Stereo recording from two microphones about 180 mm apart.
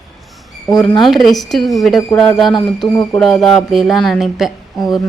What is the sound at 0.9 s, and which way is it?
Speech, centre (ahead or behind).